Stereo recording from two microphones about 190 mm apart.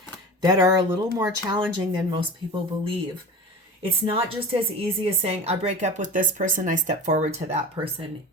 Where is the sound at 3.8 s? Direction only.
30° right (ahead or behind).